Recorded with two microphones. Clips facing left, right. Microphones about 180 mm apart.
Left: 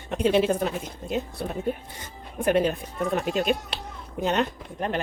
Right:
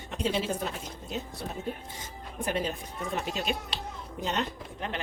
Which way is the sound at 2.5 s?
60° left (ahead or behind).